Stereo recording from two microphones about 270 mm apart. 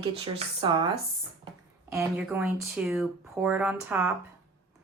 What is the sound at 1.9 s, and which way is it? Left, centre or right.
A woman's voice, centre.